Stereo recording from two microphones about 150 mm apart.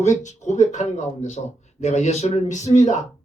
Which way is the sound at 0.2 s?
55° left (ahead or behind).